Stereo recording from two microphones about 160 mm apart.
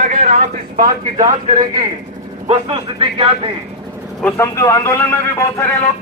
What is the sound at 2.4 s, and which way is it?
A man's voice, 40° right (ahead or behind).